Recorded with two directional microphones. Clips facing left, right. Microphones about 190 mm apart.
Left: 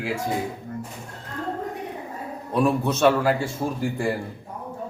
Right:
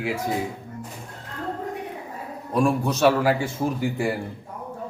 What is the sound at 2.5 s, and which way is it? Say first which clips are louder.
Speech: even; 5° left (ahead or behind).